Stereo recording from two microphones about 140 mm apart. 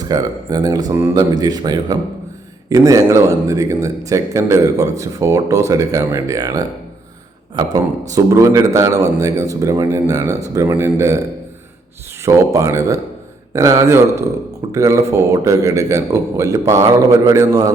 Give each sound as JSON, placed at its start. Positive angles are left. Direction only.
{"t": 0.0, "sound": "speech", "side_deg": -25}
{"t": 12.2, "sound": "speech", "side_deg": -20}